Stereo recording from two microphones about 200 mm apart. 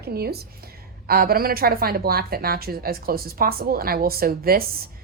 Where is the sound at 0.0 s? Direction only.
50° right (ahead or behind).